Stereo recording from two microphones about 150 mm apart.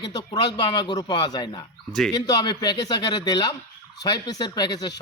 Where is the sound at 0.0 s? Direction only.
30° left (ahead or behind).